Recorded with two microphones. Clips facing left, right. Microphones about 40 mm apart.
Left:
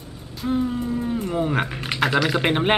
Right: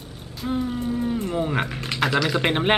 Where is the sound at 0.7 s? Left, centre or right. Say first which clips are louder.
Even; right.